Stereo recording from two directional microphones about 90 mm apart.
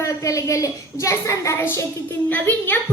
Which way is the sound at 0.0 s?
35° left (ahead or behind).